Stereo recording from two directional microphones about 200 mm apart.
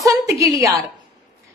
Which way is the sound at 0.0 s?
15° right (ahead or behind).